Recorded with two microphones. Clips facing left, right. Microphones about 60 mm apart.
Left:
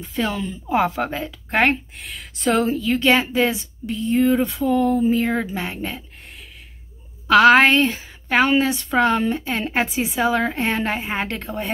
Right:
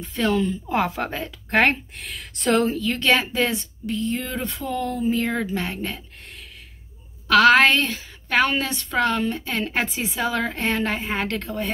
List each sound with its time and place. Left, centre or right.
0.0 s a woman's voice: centre
7.2 s a woman's voice: centre